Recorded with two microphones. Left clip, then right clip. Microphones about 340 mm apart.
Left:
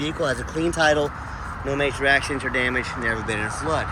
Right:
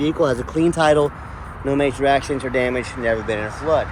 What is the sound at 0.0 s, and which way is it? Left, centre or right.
Speech, centre.